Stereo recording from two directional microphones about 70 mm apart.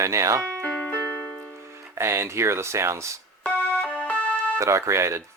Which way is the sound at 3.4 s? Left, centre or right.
Centre.